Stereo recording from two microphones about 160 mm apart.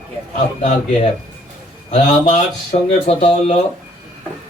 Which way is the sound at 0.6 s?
50° left (ahead or behind).